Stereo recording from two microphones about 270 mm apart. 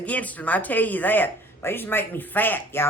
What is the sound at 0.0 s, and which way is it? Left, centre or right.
A woman's voice, centre.